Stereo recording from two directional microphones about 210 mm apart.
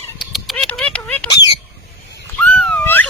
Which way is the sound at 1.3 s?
20° left (ahead or behind).